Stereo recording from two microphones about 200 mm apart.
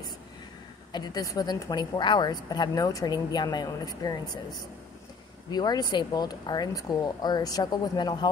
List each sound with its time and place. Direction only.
0.9 s a woman's voice: 20° left (ahead or behind)
5.5 s a woman's voice: 20° left (ahead or behind)